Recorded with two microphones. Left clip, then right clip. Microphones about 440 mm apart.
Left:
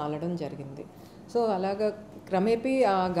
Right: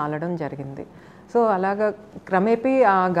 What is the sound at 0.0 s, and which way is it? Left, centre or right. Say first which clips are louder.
A woman's voice: right 6 dB; right.